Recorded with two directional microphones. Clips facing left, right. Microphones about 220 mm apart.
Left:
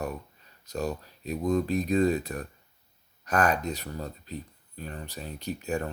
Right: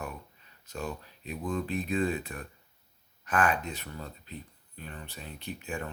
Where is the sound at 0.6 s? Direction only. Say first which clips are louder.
Left 6 dB; 40° left (ahead or behind).